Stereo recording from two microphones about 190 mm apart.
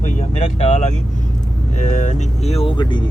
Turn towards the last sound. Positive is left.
turn(degrees=25)  # may be behind; listen again after turning